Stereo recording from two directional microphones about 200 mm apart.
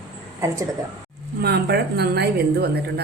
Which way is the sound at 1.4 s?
55° right (ahead or behind).